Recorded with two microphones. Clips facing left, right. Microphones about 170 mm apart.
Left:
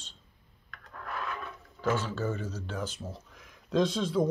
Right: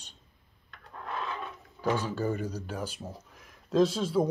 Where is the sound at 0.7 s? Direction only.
25° right (ahead or behind).